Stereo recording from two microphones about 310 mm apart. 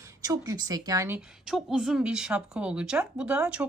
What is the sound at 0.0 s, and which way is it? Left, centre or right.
A woman's voice, centre.